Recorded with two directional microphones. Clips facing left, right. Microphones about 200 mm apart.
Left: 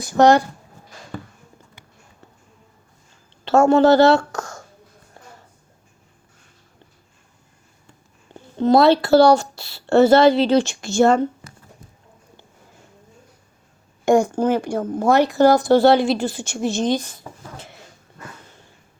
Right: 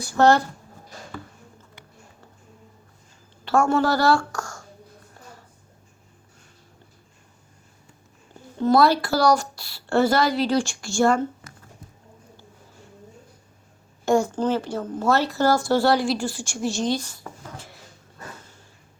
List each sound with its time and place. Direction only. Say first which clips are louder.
0.0 s speech: left 4 dB; 15° left (ahead or behind)
3.4 s a woman's voice: left 7 dB; 25° left (ahead or behind)
8.3 s a woman's voice: left 4 dB; 20° left (ahead or behind)
14.0 s a woman's voice: left 4 dB; 15° left (ahead or behind)